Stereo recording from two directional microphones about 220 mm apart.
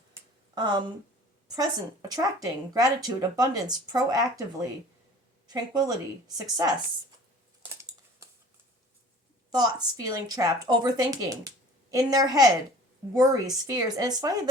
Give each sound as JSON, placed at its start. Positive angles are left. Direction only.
{"t": 0.1, "sound": "a sound", "side_deg": -20}
{"t": 1.5, "sound": "speech", "side_deg": -15}
{"t": 5.5, "sound": "a woman's voice", "side_deg": -15}
{"t": 9.5, "sound": "speech", "side_deg": -20}